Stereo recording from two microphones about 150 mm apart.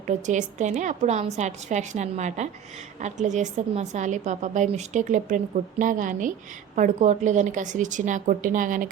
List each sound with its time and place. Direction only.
0.3 s a woman's voice: 55° right (ahead or behind)